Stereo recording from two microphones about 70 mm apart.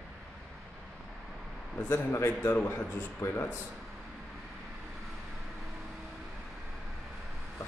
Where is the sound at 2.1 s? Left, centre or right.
Left.